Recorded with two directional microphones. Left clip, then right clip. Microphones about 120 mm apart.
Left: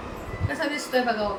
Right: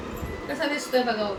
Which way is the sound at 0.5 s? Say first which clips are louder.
Right 1 dB; 20° left (ahead or behind).